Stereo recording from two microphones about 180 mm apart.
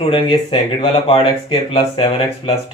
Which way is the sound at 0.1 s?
25° left (ahead or behind).